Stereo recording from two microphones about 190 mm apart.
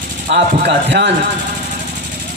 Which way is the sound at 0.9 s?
65° right (ahead or behind).